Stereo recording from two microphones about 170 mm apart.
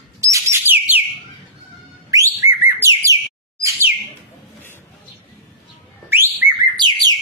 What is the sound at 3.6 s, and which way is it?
Bird, 20° right (ahead or behind).